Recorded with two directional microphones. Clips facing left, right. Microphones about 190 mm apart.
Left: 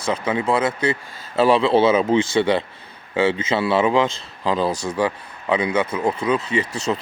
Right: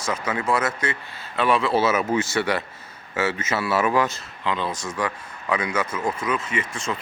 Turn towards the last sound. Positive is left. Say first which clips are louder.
# left 6 dB
turn(degrees=35)  # may be behind; listen again after turning